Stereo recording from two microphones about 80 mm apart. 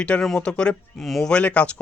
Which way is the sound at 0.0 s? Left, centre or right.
Centre.